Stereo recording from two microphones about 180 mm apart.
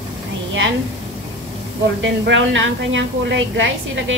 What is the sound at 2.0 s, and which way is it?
A woman's voice, 90° right.